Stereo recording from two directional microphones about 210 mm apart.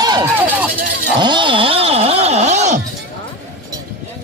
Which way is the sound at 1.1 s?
20° right (ahead or behind).